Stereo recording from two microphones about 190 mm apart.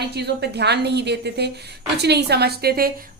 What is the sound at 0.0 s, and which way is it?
A woman's voice, 60° right (ahead or behind).